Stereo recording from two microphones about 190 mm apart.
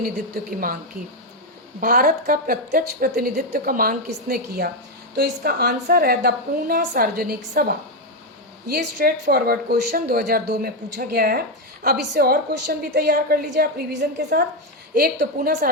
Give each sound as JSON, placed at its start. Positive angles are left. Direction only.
{"t": 0.4, "sound": "a woman's voice", "side_deg": -50}
{"t": 1.8, "sound": "a woman's voice", "side_deg": -50}